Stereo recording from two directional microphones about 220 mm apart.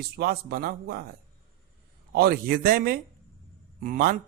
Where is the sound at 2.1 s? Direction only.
45° right (ahead or behind).